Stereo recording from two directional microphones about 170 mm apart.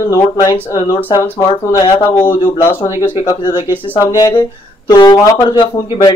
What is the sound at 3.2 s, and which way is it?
Speech, 25° left (ahead or behind).